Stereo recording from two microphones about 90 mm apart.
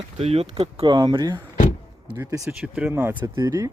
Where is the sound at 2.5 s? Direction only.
10° right (ahead or behind).